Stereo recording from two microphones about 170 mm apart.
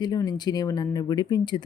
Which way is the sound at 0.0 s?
25° left (ahead or behind).